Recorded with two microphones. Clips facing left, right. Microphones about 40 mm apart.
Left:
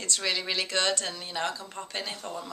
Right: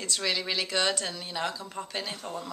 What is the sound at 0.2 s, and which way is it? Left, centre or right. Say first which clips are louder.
Speech: even; centre.